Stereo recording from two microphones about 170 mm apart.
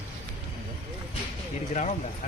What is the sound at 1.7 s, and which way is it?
Speech, 45° left (ahead or behind).